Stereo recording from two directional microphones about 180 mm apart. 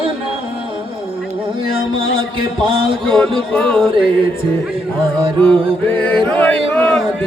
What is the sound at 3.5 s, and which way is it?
Music, 5° left (ahead or behind).